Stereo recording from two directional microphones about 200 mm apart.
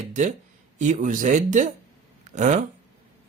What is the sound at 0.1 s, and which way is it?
A man's voice, 40° right (ahead or behind).